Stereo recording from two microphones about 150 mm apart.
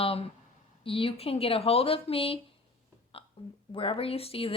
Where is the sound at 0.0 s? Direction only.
40° left (ahead or behind).